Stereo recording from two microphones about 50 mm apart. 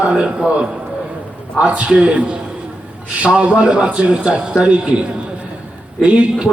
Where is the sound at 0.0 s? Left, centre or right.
Centre.